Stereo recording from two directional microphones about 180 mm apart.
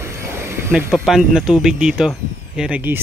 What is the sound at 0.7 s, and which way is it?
Speech, 10° right (ahead or behind).